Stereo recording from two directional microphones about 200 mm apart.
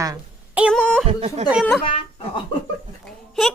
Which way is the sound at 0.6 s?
5° left (ahead or behind).